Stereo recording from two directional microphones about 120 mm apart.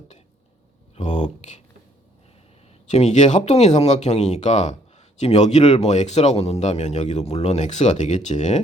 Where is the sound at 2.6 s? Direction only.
60° left (ahead or behind).